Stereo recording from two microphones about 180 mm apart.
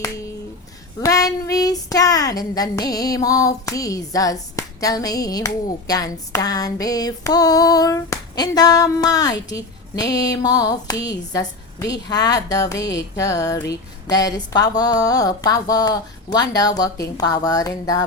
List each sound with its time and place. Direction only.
1.0 s child singing: 20° left (ahead or behind)
5.9 s music: 20° left (ahead or behind)